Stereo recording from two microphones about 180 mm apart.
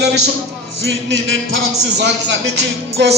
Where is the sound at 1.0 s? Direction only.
85° right.